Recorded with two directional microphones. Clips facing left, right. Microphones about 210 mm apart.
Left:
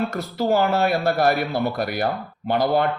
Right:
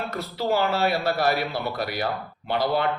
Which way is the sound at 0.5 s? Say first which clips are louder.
Left 3 dB; 50° left (ahead or behind).